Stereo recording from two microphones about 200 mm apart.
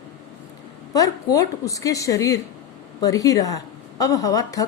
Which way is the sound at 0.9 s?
15° left (ahead or behind).